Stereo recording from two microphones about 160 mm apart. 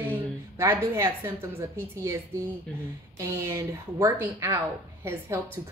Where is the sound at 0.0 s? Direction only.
15° right (ahead or behind).